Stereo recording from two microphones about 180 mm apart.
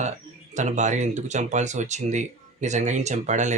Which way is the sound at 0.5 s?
40° right (ahead or behind).